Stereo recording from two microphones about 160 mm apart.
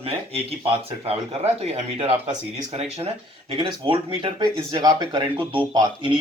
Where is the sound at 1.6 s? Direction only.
40° right (ahead or behind).